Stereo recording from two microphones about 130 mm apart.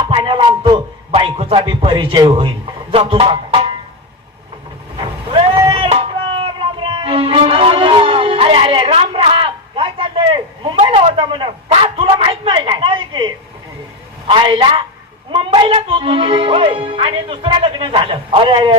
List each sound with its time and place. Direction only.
0.0 s music: 40° right (ahead or behind)
2.9 s speech: 45° right (ahead or behind)
5.3 s a sound: 40° right (ahead or behind)
5.7 s music: 45° right (ahead or behind)
11.0 s a sound: 40° right (ahead or behind)
14.3 s a man's voice: 40° right (ahead or behind)